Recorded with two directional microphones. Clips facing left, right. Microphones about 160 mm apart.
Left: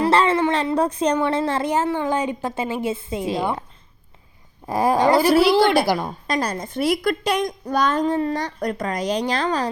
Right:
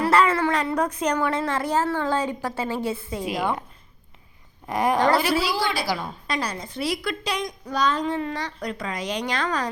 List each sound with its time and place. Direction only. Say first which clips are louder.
0.0 s speech: left 2 dB; 25° left (ahead or behind)
4.6 s dog: left 3 dB; 30° left (ahead or behind)
4.9 s a woman's voice: left 4 dB; 20° left (ahead or behind)
5.2 s a woman's voice: left 9 dB; 55° left (ahead or behind); by 9.6 s 30° left (ahead or behind)